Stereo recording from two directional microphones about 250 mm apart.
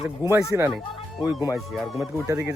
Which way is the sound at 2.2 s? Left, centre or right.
Centre.